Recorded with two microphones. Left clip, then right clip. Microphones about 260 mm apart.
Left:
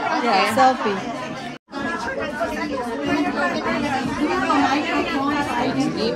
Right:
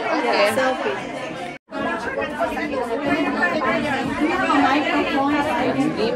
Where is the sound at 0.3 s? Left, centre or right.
Left.